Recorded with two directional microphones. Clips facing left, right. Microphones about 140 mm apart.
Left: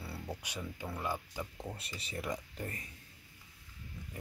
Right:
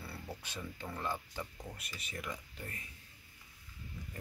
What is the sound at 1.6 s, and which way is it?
Speech, 30° left (ahead or behind).